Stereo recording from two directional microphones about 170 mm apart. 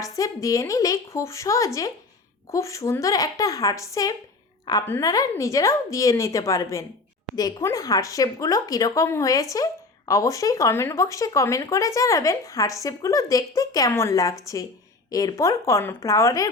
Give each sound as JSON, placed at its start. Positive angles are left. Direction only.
{"t": 0.0, "sound": "speech", "side_deg": 20}